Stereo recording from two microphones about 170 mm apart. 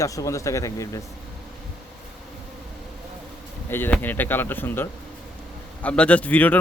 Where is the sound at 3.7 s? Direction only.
10° left (ahead or behind).